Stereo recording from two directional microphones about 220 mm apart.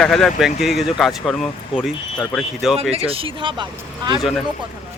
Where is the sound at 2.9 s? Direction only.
25° right (ahead or behind).